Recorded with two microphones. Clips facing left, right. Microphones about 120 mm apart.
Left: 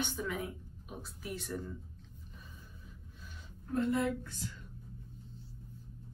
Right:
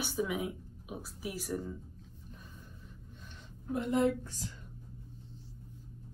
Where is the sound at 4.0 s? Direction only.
35° right (ahead or behind).